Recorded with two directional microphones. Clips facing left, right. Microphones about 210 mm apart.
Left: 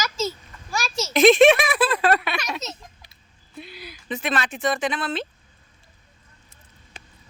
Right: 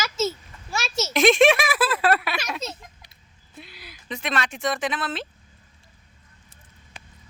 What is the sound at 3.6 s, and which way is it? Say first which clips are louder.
Speech: left 4 dB; centre (ahead or behind).